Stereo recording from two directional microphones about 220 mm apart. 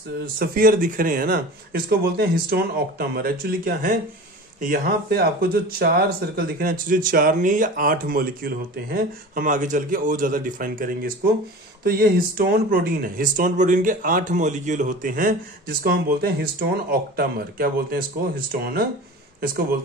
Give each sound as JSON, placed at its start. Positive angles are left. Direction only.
{"t": 0.4, "sound": "speech", "side_deg": -40}